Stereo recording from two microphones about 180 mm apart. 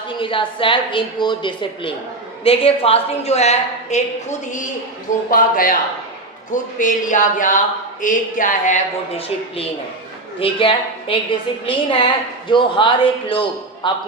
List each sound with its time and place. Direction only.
0.2 s a woman's voice: 30° left (ahead or behind)